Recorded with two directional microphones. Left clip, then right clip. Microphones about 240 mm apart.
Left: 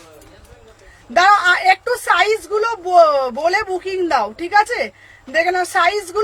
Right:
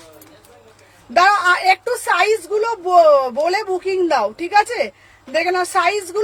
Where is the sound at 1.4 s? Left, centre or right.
Centre.